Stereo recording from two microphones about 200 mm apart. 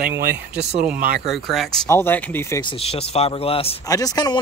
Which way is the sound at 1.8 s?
10° left (ahead or behind).